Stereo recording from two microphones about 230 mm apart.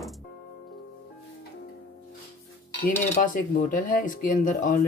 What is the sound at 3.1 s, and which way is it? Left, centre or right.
Speech, left.